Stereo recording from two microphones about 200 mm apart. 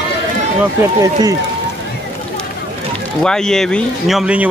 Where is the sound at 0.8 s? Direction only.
15° right (ahead or behind).